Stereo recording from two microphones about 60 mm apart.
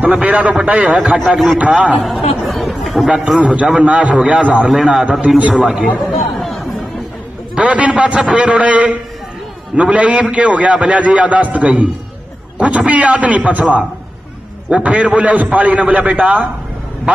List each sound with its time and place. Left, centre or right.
0.0 s a man's voice: right
0.9 s speech: centre
1.6 s a man's voice: right
2.0 s speech: centre
2.8 s a sound: centre
3.3 s a man's voice: centre
5.7 s speech: centre
6.4 s chatter: centre
7.5 s a man's voice: right